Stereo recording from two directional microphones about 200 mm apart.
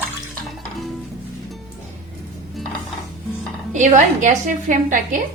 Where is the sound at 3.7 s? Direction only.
35° right (ahead or behind).